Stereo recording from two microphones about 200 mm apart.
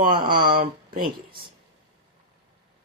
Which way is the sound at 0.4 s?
25° right (ahead or behind).